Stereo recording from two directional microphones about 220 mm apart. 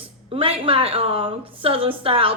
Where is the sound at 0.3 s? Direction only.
25° right (ahead or behind).